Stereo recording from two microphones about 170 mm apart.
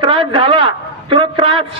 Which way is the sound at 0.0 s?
30° right (ahead or behind).